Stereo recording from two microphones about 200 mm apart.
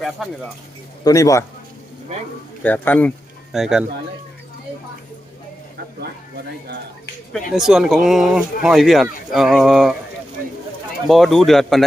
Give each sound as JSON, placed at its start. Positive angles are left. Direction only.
{"t": 0.0, "sound": "speech", "side_deg": 0}
{"t": 1.0, "sound": "speech", "side_deg": 15}
{"t": 2.6, "sound": "speech", "side_deg": 10}
{"t": 7.3, "sound": "speech", "side_deg": 0}
{"t": 11.1, "sound": "speech", "side_deg": 0}